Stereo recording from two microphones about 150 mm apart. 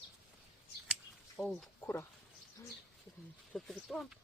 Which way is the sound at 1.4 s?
Centre (ahead or behind).